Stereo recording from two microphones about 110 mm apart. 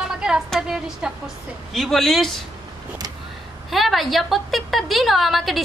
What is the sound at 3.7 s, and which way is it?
A woman's voice, centre (ahead or behind).